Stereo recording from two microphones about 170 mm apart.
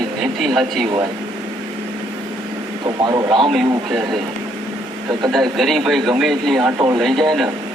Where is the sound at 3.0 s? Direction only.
25° right (ahead or behind).